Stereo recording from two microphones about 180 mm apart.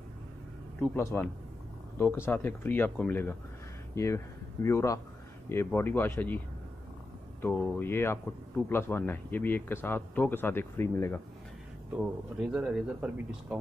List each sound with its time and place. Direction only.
0.7 s speech: 10° left (ahead or behind)
7.4 s speech: 10° left (ahead or behind)
11.9 s speech: 5° right (ahead or behind)